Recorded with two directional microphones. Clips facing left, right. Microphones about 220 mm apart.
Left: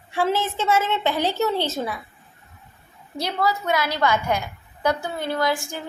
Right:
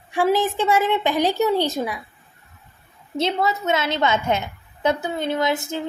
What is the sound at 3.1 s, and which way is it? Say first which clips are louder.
A woman's voice: right 3 dB; 25° right (ahead or behind).